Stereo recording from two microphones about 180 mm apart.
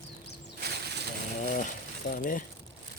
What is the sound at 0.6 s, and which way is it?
Ratchet, 65° right (ahead or behind).